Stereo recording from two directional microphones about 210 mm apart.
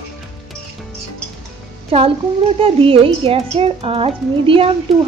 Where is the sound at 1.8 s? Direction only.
25° right (ahead or behind).